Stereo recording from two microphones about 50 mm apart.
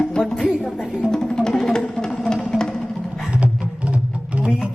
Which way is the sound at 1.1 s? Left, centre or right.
Centre.